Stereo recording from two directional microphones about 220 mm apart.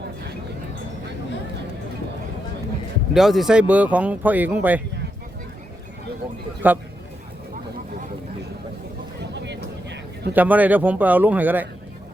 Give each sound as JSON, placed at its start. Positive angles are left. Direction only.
{"t": 3.2, "sound": "speech", "side_deg": 0}
{"t": 6.6, "sound": "speech", "side_deg": -10}
{"t": 9.3, "sound": "a sound", "side_deg": -50}
{"t": 10.3, "sound": "speech", "side_deg": -5}